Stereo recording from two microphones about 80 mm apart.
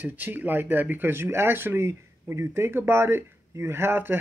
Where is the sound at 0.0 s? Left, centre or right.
Right.